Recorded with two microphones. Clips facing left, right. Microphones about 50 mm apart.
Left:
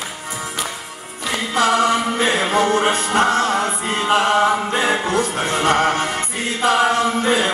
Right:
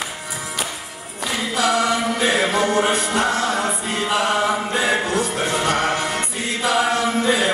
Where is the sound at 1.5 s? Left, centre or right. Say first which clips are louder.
Left 3 dB; left.